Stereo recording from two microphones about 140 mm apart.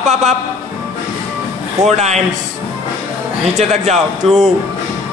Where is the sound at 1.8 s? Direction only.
55° right (ahead or behind).